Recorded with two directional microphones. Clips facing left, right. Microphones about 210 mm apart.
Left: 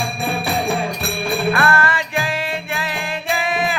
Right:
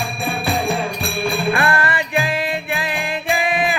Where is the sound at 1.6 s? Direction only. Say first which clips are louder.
Left 1 dB; 20° right (ahead or behind).